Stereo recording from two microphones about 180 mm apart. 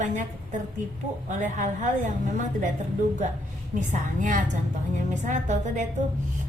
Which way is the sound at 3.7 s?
45° right (ahead or behind).